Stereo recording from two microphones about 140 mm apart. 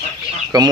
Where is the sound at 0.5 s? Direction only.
25° right (ahead or behind).